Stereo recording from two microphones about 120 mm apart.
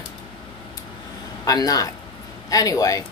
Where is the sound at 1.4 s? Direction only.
30° left (ahead or behind).